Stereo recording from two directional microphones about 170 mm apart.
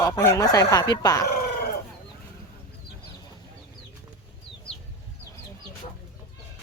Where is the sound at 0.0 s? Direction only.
20° left (ahead or behind).